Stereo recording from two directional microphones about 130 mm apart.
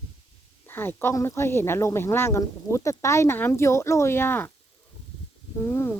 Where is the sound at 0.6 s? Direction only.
15° left (ahead or behind).